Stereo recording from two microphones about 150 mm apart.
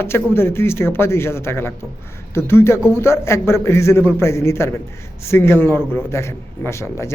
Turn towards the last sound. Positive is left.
turn(degrees=20)  # may be behind; listen again after turning